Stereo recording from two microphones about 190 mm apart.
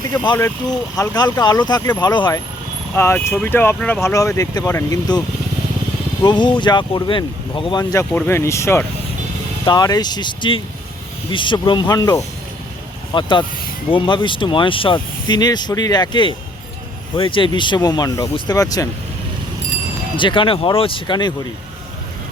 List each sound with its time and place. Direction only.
0.2 s speech: 25° left (ahead or behind)
6.2 s speech: 25° left (ahead or behind)
20.1 s speech: 25° left (ahead or behind)